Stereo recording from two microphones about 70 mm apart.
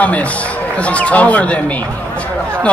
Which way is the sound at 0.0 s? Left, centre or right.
Left.